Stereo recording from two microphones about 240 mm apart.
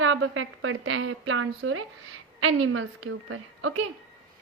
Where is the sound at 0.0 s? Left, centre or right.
Right.